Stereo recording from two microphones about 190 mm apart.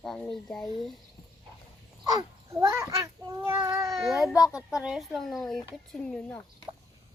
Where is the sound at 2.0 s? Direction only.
20° right (ahead or behind).